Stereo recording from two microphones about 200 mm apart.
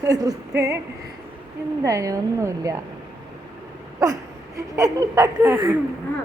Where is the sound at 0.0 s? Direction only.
15° right (ahead or behind).